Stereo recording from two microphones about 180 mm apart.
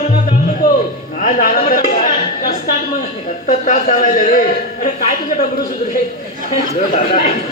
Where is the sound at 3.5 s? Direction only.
45° left (ahead or behind).